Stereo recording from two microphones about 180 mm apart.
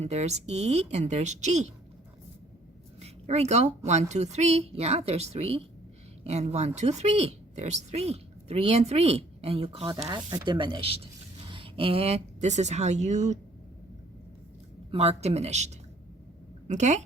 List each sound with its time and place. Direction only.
0.0 s speech: 35° right (ahead or behind)
3.0 s a sound: 35° right (ahead or behind)
4.1 s speech: 40° right (ahead or behind)
14.8 s speech: 35° right (ahead or behind)